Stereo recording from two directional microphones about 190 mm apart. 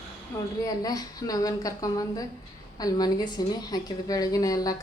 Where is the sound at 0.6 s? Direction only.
20° left (ahead or behind).